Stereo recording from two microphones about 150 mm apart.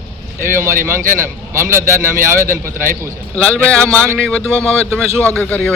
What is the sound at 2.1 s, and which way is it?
Speech, 65° right (ahead or behind).